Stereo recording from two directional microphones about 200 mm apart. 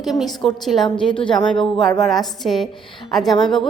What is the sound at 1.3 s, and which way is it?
A woman's voice, centre (ahead or behind).